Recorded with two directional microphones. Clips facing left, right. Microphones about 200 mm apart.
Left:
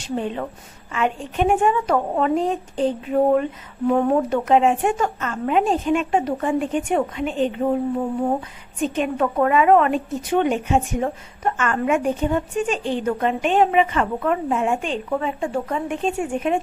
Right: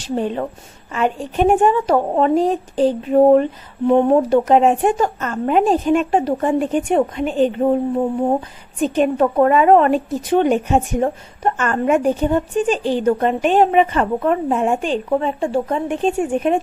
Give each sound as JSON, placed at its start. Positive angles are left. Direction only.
{"t": 0.1, "sound": "a woman's voice", "side_deg": -40}